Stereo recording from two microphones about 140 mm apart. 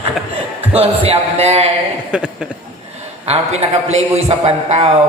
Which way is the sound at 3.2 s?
50° right (ahead or behind).